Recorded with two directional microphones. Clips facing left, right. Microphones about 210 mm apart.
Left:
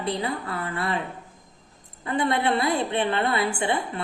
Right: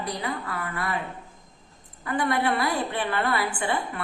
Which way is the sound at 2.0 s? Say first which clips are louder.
Left 1 dB; 25° left (ahead or behind).